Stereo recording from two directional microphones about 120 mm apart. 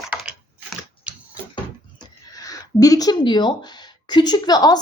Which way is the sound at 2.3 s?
30° left (ahead or behind).